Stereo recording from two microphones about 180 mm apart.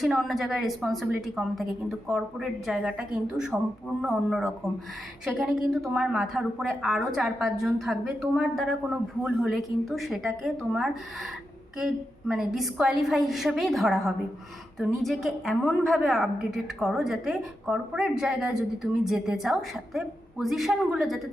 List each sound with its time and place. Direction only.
0.0 s a woman's voice: centre (ahead or behind)
5.9 s a woman's voice: 5° right (ahead or behind)
12.3 s a woman's voice: centre (ahead or behind)